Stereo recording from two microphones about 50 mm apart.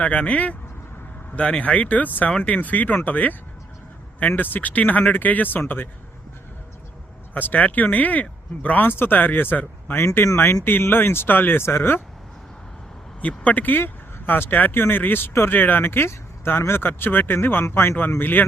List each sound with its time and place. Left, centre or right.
0.0 s speech: left
7.3 s speech: left
8.9 s speech: left
10.3 s speech: left
13.2 s speech: left